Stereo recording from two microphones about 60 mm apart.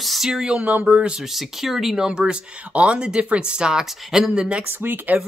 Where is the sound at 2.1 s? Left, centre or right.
Centre.